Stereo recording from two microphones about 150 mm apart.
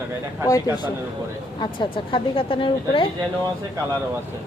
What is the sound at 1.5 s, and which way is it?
A woman's voice, 30° left (ahead or behind).